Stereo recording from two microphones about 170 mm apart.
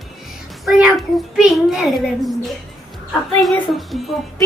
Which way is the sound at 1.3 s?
Centre (ahead or behind).